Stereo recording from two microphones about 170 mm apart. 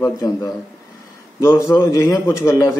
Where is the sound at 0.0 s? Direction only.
20° left (ahead or behind).